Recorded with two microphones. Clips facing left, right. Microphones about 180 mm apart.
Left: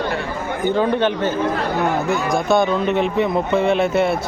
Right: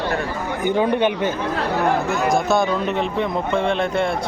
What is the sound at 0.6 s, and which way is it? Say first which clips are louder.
Speech: left 1 dB; 10° right (ahead or behind).